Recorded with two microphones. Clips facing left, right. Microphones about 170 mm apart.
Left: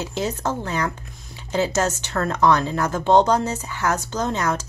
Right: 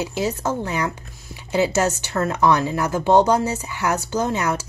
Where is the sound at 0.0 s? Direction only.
10° right (ahead or behind).